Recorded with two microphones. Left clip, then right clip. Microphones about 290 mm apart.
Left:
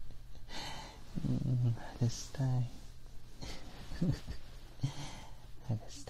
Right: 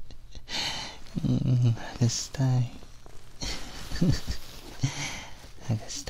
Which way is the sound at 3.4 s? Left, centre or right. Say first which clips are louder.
Right 13 dB; right.